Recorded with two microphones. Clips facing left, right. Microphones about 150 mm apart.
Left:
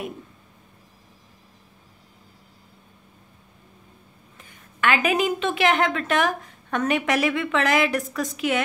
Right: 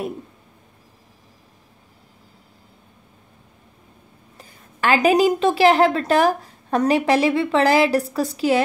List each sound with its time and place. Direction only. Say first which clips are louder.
4.4 s a woman's voice: right 2 dB; 35° right (ahead or behind)